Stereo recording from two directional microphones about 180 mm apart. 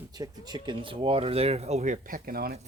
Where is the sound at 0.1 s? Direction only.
20° right (ahead or behind); by 2.6 s 55° right (ahead or behind).